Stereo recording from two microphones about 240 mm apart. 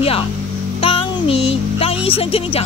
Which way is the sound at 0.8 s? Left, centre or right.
Left.